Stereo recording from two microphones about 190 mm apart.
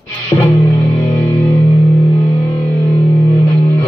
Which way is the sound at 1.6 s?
35° left (ahead or behind).